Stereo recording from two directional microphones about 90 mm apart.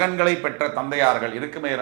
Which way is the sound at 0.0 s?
15° right (ahead or behind).